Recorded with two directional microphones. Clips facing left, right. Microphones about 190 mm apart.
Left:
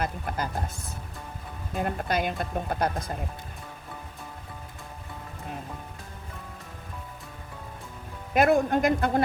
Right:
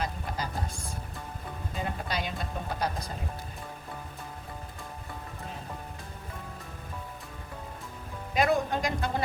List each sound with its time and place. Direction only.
0.0 s speech: 55° left (ahead or behind)
1.7 s speech: 55° left (ahead or behind)
8.3 s a man's voice: 55° left (ahead or behind)